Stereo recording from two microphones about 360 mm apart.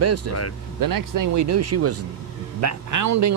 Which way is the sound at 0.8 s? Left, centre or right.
Right.